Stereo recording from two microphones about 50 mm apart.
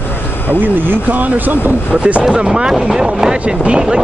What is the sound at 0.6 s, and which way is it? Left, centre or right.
Speech, right.